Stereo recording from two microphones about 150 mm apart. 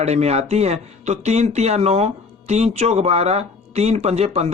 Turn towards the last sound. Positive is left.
turn(degrees=-45)  # may be behind; listen again after turning